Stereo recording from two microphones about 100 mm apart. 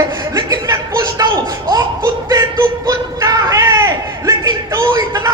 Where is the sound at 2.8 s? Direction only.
40° right (ahead or behind).